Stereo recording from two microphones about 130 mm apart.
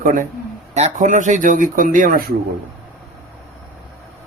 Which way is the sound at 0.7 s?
65° right (ahead or behind).